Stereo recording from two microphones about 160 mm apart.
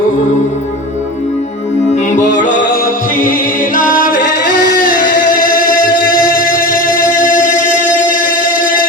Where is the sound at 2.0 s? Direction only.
50° left (ahead or behind).